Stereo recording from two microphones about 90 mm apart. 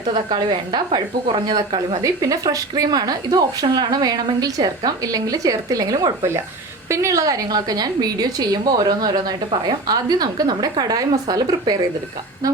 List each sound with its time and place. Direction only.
0.1 s a woman's voice: 55° right (ahead or behind)
2.0 s speech: 40° right (ahead or behind)